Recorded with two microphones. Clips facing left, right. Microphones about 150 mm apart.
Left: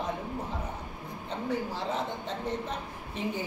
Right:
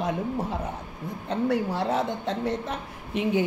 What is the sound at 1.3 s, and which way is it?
A woman's voice, 70° right (ahead or behind).